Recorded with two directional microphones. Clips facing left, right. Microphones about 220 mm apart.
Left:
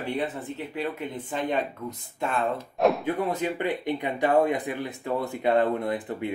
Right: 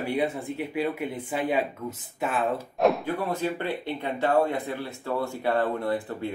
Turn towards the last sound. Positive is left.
turn(degrees=20)  # may be behind; listen again after turning